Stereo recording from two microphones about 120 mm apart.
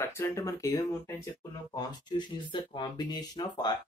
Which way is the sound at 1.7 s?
40° left (ahead or behind).